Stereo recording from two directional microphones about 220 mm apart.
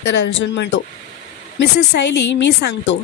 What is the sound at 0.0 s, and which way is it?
Speech, 55° left (ahead or behind).